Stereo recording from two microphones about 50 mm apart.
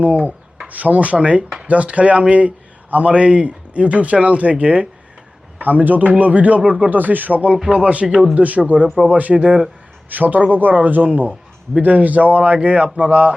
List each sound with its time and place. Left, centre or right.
0.0 s a man's voice: right
6.9 s a man's voice: right